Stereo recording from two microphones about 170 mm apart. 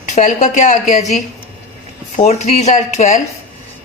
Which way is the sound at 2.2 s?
40° left (ahead or behind).